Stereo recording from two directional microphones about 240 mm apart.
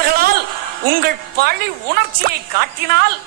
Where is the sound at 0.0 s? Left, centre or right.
Right.